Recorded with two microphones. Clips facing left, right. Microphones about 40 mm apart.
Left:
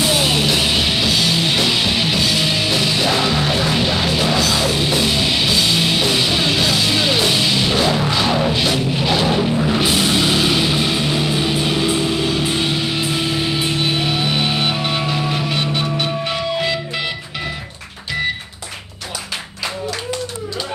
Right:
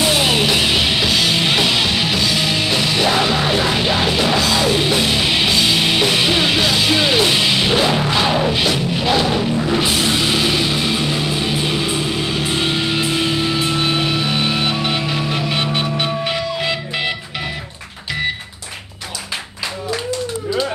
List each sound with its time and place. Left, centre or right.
0.0 s music: centre
1.3 s music: centre
8.6 s music: centre
15.5 s music: centre